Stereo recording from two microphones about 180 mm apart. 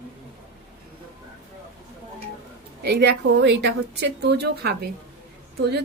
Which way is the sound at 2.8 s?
65° right (ahead or behind).